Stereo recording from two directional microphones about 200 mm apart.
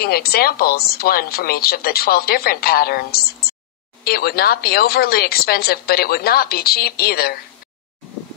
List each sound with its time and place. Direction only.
0.0 s speech: 50° left (ahead or behind)